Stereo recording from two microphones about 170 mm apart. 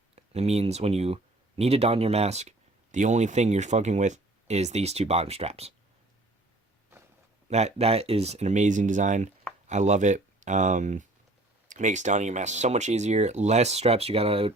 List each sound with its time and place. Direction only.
0.2 s speech: 40° right (ahead or behind)
7.5 s speech: 40° right (ahead or behind)